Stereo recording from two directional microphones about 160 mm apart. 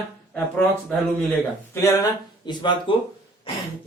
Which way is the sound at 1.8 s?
20° left (ahead or behind).